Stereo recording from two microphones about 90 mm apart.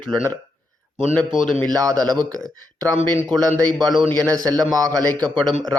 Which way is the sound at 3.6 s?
50° right (ahead or behind).